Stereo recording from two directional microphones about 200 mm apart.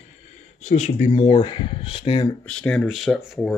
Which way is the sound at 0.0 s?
35° left (ahead or behind).